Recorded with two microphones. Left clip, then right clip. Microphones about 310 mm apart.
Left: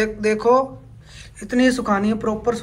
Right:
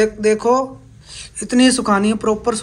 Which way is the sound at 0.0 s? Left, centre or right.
Centre.